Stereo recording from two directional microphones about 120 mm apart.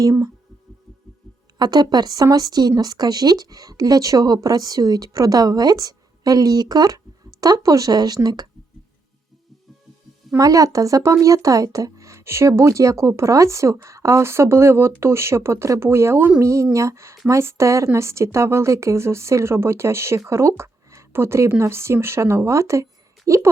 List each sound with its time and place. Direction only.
0.0 s speech: 25° right (ahead or behind)
1.5 s speech: 35° right (ahead or behind)
10.3 s speech: 30° right (ahead or behind)